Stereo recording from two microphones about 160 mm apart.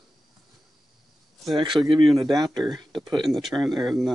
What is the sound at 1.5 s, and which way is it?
Speech, 30° right (ahead or behind).